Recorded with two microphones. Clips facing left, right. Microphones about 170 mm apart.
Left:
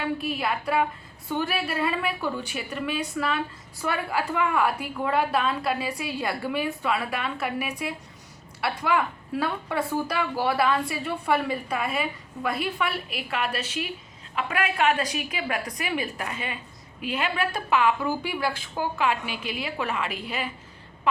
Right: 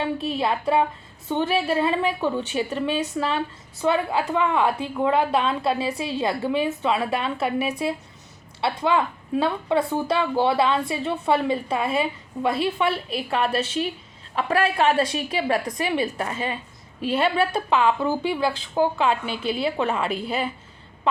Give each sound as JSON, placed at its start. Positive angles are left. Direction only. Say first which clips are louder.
{"t": 0.0, "sound": "a woman's voice", "louder": "right 3 dB", "side_deg": -25}